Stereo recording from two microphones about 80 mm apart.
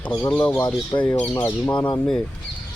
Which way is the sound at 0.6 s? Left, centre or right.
Left.